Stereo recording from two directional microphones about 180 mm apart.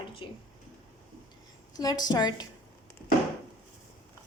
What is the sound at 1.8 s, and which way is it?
Speech, 20° left (ahead or behind).